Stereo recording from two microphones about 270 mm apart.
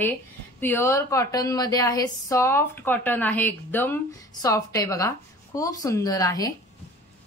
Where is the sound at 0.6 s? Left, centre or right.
Centre.